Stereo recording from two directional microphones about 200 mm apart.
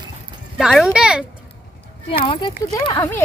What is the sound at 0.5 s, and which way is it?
Speech, 5° right (ahead or behind).